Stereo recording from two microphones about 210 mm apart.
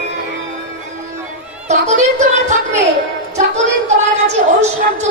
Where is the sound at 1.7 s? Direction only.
35° right (ahead or behind).